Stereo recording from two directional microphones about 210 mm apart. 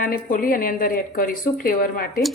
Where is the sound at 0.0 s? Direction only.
40° left (ahead or behind).